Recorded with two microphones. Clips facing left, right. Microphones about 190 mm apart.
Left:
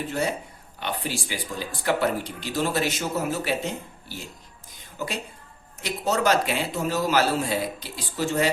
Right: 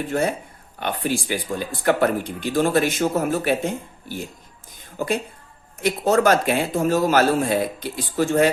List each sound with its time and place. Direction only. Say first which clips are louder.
0.1 s speech: right 5 dB; 50° right (ahead or behind)